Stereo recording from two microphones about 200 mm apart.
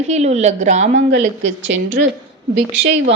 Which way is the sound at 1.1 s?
70° right (ahead or behind).